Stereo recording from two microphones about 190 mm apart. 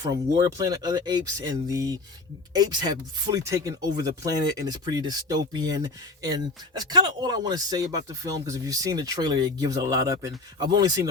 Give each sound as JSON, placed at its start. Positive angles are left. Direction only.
{"t": 0.0, "sound": "speech", "side_deg": -20}